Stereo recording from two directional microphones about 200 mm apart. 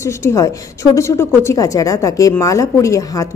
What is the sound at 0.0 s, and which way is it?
A woman's voice, 15° left (ahead or behind).